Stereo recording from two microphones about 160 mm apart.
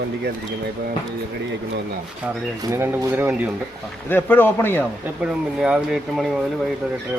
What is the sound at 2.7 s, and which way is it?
Speech, 15° right (ahead or behind).